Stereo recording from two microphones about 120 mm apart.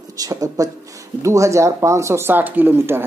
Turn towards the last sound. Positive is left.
turn(degrees=-20)  # may be behind; listen again after turning